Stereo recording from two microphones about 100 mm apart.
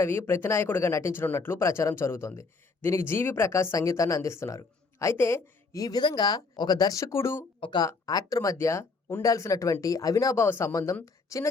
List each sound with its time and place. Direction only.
0.0 s speech: 25° left (ahead or behind)
6.0 s speech: 50° left (ahead or behind); by 7.4 s 25° left (ahead or behind)
7.6 s speech: 50° left (ahead or behind)
7.9 s speech: 40° left (ahead or behind)
10.4 s speech: 25° left (ahead or behind)